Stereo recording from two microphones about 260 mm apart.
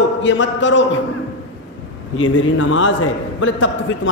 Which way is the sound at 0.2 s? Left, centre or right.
Left.